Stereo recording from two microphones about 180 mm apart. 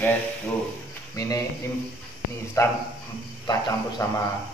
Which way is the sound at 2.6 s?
20° left (ahead or behind).